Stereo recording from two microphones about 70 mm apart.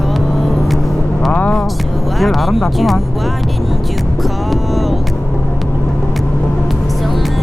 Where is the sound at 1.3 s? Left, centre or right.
Centre.